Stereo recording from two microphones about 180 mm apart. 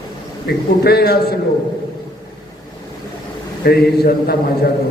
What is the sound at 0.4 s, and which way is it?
Speech, 60° left (ahead or behind).